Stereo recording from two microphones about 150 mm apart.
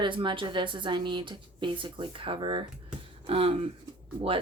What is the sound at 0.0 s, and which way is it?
Speech, 35° right (ahead or behind).